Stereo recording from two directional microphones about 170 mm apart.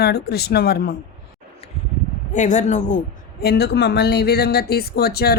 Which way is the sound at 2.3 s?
45° left (ahead or behind).